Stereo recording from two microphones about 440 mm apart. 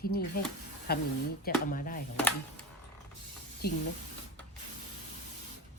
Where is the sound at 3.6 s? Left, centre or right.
Left.